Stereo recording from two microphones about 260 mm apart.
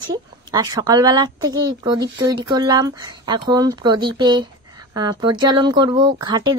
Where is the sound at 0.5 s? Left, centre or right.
Centre.